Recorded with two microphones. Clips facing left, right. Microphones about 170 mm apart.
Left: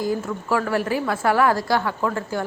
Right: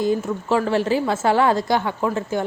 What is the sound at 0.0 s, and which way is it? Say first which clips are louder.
A woman's voice: right 3 dB; 20° right (ahead or behind).